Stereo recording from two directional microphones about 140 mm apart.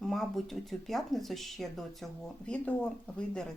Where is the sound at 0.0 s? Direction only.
Centre (ahead or behind).